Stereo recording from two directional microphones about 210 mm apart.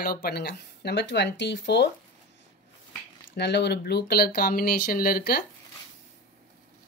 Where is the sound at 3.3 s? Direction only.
55° left (ahead or behind).